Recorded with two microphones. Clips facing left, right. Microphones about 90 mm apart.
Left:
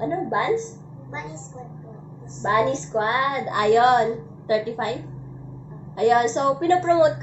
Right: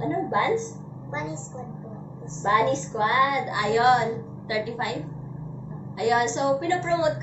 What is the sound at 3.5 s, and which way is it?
Speech, 55° left (ahead or behind).